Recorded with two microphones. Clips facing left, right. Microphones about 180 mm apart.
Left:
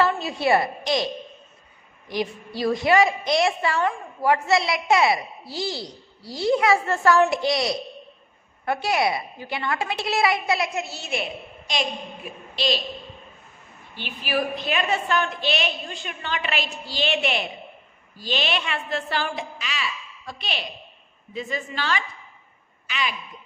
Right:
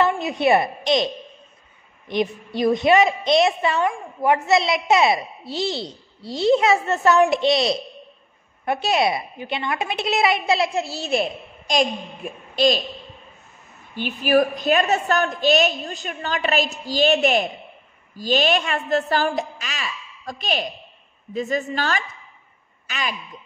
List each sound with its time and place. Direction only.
0.0 s a woman's voice: 20° right (ahead or behind); by 12.8 s 45° right (ahead or behind)
13.9 s a woman's voice: 45° right (ahead or behind)